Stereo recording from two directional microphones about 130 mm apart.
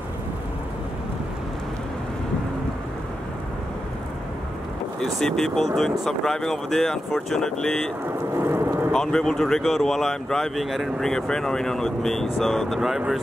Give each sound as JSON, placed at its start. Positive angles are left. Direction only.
{"t": 5.0, "sound": "speech", "side_deg": 5}
{"t": 8.4, "sound": "vehicle", "side_deg": -20}
{"t": 8.9, "sound": "speech", "side_deg": 5}